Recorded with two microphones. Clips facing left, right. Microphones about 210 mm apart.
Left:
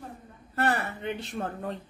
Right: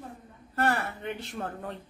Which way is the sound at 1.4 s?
30° left (ahead or behind).